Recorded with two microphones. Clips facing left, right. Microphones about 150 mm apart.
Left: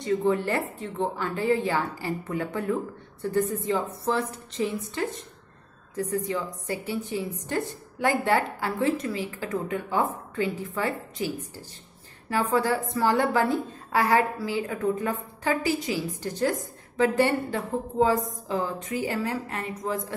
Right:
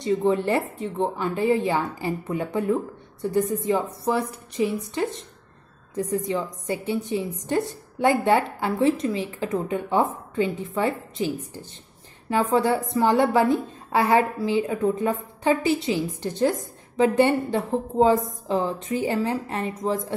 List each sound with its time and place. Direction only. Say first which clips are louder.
0.0 s a woman's voice: right 3 dB; 20° right (ahead or behind)